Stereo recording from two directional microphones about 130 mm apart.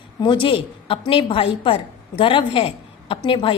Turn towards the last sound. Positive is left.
turn(degrees=40)  # may be behind; listen again after turning